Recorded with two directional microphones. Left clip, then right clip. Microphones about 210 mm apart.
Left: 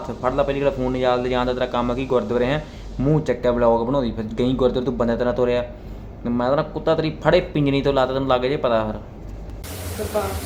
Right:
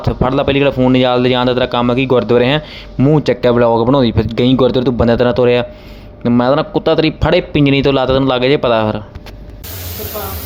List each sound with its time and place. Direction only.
0.2 s speech: 45° right (ahead or behind)